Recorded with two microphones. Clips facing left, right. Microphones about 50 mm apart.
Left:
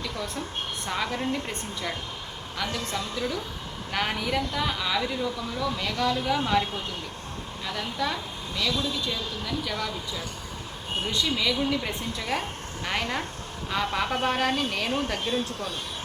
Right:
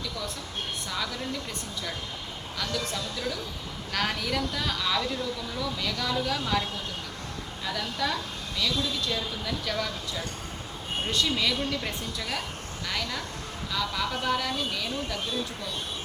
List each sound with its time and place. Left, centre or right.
0.0 s vehicle: left
0.9 s speech: left
2.7 s speech: left
3.9 s a woman's voice: centre
7.7 s a woman's voice: centre
9.1 s speech: centre
11.2 s speech: centre
12.0 s a woman's voice: left